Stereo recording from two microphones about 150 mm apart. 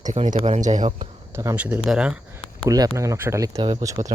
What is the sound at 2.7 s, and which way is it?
Speech, 25° right (ahead or behind).